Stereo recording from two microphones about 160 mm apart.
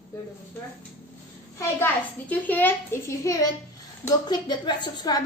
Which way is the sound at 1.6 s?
15° left (ahead or behind).